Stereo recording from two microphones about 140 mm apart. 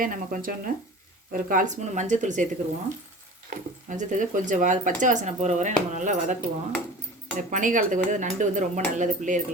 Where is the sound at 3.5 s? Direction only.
65° right (ahead or behind).